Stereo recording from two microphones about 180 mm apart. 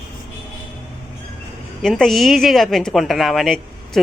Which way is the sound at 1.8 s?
Centre (ahead or behind).